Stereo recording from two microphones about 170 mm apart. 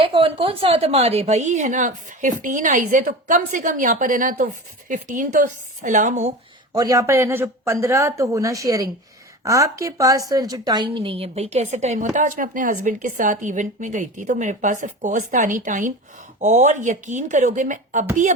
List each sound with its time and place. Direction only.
0.0 s a woman's voice: 30° right (ahead or behind)
6.7 s a woman's voice: 20° right (ahead or behind); by 18.0 s 50° right (ahead or behind)